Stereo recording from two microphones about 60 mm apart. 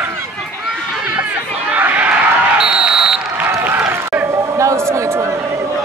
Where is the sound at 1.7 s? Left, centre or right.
Right.